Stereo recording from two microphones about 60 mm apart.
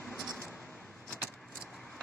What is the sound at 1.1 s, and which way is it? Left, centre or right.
Vehicle, centre.